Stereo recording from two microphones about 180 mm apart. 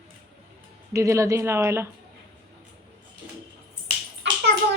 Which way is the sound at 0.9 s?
15° right (ahead or behind).